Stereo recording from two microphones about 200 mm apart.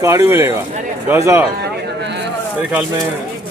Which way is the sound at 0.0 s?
15° right (ahead or behind).